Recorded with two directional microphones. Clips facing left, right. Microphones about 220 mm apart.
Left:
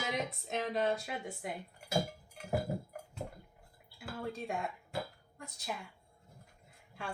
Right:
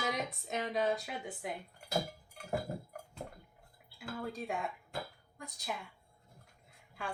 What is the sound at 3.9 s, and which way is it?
A woman's voice, centre (ahead or behind).